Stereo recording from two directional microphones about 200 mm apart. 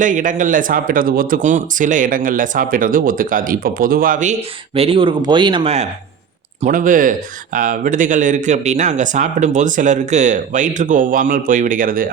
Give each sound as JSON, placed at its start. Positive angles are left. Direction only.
{"t": 0.0, "sound": "speech", "side_deg": -40}
{"t": 6.6, "sound": "speech", "side_deg": -40}